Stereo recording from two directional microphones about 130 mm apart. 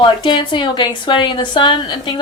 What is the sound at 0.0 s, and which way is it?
A woman's voice, 35° left (ahead or behind).